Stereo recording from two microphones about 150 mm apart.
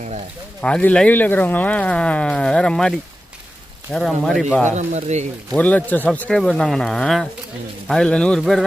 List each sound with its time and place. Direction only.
0.6 s speech: 10° left (ahead or behind)
3.9 s speech: centre (ahead or behind)
4.8 s speech: 50° right (ahead or behind)
5.5 s speech: 10° left (ahead or behind)